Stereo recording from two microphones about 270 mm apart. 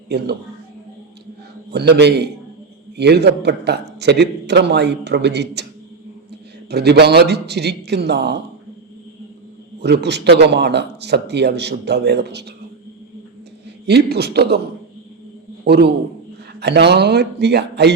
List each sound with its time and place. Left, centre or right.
0.1 s a man's voice: right
1.7 s a man's voice: right
6.7 s a man's voice: right
9.8 s a man's voice: right
13.8 s a man's voice: right
15.6 s a man's voice: right